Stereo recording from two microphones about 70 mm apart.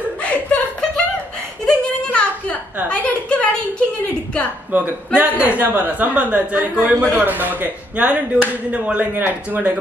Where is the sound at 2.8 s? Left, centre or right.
Centre.